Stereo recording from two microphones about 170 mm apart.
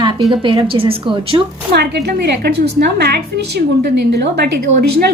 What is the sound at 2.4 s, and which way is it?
A woman's voice, 75° right (ahead or behind).